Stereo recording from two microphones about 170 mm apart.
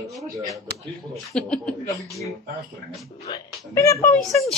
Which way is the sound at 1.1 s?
Centre (ahead or behind).